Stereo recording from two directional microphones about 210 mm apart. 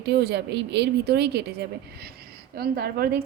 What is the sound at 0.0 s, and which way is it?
A woman's voice, 55° right (ahead or behind).